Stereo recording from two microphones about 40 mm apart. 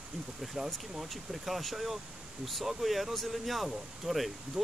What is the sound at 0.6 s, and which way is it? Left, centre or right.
Speech, right.